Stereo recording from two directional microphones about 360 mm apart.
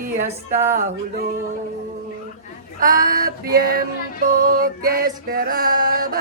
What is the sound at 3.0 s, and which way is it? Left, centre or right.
Speech, right.